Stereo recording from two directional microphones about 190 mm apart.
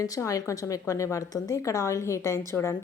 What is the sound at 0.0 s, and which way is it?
A woman's voice, 15° left (ahead or behind).